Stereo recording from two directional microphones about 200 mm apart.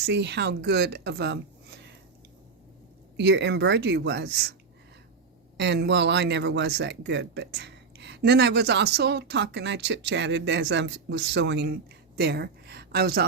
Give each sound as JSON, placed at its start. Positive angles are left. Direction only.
{"t": 0.0, "sound": "speech", "side_deg": -60}
{"t": 3.2, "sound": "speech", "side_deg": -60}
{"t": 5.5, "sound": "speech", "side_deg": -60}